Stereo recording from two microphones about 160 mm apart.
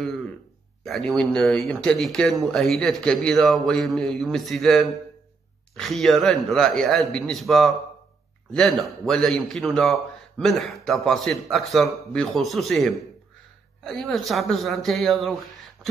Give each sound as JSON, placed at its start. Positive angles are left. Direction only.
{"t": 0.8, "sound": "a man's voice", "side_deg": 5}